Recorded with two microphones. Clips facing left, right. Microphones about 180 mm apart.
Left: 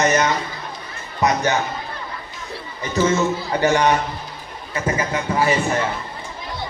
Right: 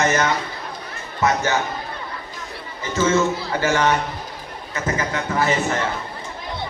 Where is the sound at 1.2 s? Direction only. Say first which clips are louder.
Left 1 dB; 20° left (ahead or behind).